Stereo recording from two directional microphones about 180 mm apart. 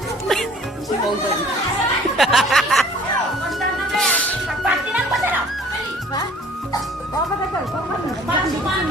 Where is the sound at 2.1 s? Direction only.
Centre (ahead or behind).